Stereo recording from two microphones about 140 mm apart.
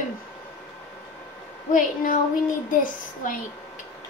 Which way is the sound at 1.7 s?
70° left (ahead or behind).